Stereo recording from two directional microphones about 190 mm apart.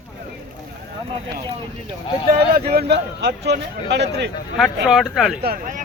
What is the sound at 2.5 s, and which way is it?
A man's voice, 55° right (ahead or behind).